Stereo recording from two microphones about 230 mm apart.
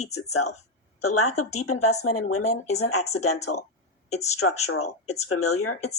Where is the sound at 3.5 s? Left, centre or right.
Left.